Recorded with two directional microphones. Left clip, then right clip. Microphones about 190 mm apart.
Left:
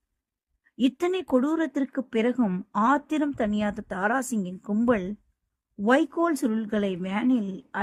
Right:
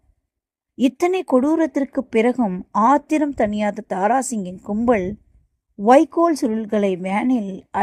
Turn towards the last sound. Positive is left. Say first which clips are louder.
# right 6 dB
turn(degrees=-15)  # may be behind; listen again after turning